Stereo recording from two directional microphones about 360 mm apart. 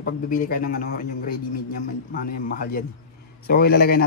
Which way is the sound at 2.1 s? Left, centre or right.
Left.